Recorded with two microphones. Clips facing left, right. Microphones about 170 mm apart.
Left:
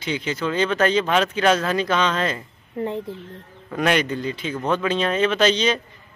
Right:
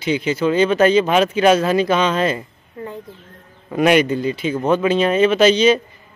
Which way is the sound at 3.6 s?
10° right (ahead or behind).